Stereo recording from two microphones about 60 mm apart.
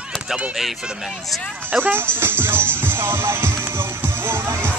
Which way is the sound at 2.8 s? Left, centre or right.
Right.